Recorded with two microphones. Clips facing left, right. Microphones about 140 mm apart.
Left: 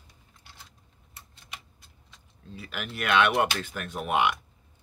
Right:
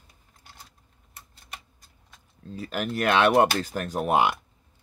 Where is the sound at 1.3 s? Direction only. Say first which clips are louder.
Right 1 dB; 45° right (ahead or behind).